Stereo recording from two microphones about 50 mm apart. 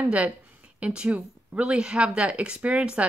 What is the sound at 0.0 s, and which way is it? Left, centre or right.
Speech, right.